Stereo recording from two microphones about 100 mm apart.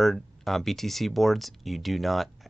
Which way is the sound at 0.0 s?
Centre (ahead or behind).